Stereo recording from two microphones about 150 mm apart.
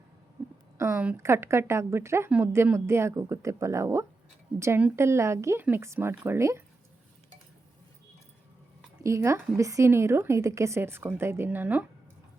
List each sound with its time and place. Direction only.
0.8 s a woman's voice: 15° right (ahead or behind)
9.0 s a woman's voice: 20° right (ahead or behind)